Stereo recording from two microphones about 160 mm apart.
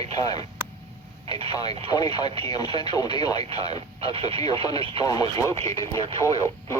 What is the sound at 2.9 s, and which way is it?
Speech, 25° left (ahead or behind).